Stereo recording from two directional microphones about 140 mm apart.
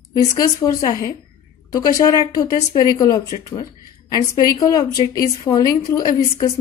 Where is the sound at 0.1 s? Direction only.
25° left (ahead or behind).